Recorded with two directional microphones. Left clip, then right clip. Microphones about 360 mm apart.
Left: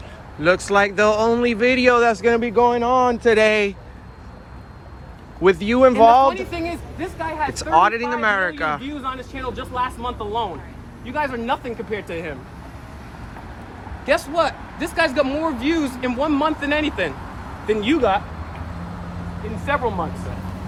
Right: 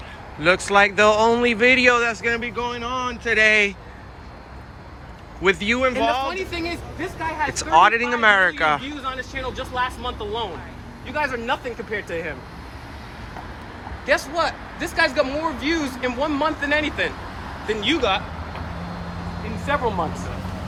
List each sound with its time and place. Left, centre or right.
0.4 s speech: centre
5.4 s speech: centre
6.2 s speech: left
7.4 s speech: centre
9.0 s speech: left
14.0 s speech: left
19.6 s speech: centre